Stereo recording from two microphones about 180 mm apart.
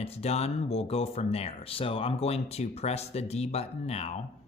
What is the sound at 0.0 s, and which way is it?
Speech, 35° left (ahead or behind).